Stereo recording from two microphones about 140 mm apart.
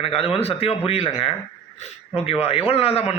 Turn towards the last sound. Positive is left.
turn(degrees=45)  # may be behind; listen again after turning